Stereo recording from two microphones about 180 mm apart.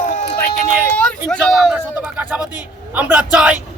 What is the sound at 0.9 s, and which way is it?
A man's voice, 5° left (ahead or behind).